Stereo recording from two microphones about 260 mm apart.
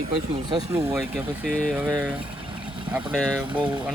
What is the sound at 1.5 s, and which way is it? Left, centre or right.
Speech, centre.